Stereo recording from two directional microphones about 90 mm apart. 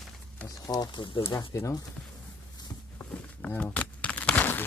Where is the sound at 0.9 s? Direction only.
65° left (ahead or behind).